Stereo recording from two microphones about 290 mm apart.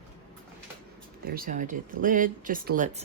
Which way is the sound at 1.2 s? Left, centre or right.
Right.